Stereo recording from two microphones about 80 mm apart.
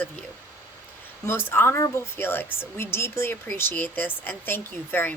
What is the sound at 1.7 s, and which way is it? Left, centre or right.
Speech, left.